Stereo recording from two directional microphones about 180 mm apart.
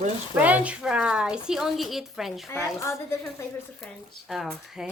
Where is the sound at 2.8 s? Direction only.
15° left (ahead or behind).